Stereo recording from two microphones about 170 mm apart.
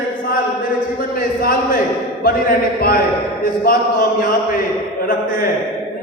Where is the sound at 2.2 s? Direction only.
60° left (ahead or behind).